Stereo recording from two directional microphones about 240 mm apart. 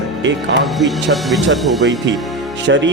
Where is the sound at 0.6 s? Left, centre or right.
Centre.